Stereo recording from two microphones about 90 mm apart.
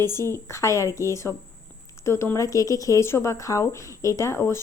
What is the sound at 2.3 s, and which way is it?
A woman's voice, 40° left (ahead or behind).